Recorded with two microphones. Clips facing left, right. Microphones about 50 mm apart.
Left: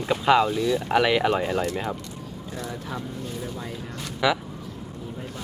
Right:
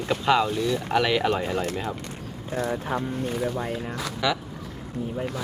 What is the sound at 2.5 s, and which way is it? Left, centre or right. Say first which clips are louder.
Speech: right 7 dB; right.